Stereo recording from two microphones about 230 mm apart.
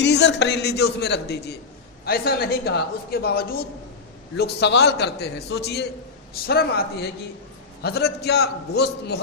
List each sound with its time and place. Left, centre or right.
0.0 s a man's voice: left